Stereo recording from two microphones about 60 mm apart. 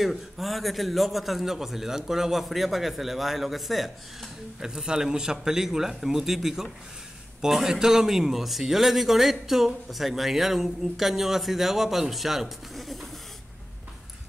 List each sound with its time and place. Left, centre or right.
0.0 s a man's voice: centre